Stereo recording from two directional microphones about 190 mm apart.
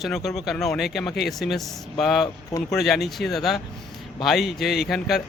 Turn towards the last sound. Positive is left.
turn(degrees=0)  # may be behind; listen again after turning